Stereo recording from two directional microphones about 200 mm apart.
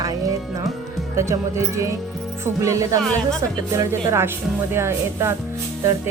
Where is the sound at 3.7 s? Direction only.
15° right (ahead or behind).